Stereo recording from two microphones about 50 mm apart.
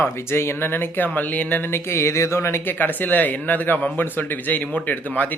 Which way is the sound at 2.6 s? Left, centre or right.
Left.